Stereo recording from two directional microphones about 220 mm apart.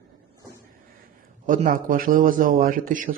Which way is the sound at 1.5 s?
35° right (ahead or behind).